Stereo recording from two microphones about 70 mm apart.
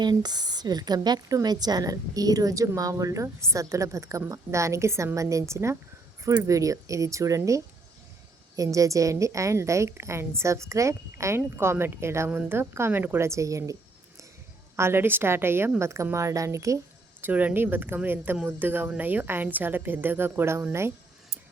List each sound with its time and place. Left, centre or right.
0.0 s a woman's voice: right
11.3 s a woman's voice: right
14.8 s a woman's voice: right
17.2 s a woman's voice: right